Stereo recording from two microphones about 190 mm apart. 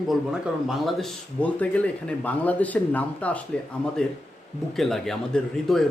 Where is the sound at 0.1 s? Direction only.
Centre (ahead or behind).